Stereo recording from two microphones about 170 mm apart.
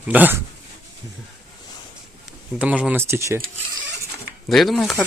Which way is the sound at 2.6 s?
5° right (ahead or behind).